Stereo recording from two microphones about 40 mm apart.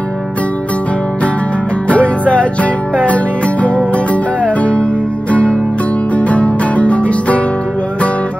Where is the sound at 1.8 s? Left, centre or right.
Left.